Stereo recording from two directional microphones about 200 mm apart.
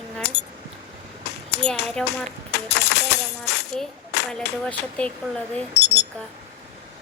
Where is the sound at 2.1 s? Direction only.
55° left (ahead or behind).